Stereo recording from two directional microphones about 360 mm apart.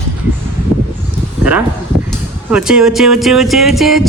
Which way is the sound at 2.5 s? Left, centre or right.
Centre.